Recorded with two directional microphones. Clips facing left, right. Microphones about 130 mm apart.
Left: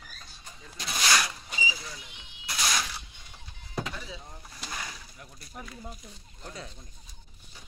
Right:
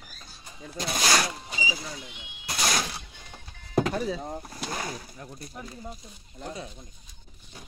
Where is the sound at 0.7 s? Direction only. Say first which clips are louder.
Right 3 dB; 40° right (ahead or behind).